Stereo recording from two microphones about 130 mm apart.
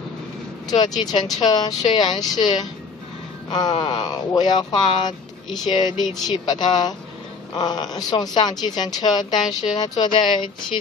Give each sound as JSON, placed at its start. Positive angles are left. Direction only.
{"t": 0.7, "sound": "speech", "side_deg": 30}